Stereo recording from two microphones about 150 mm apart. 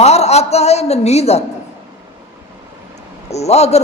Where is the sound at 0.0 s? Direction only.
45° left (ahead or behind).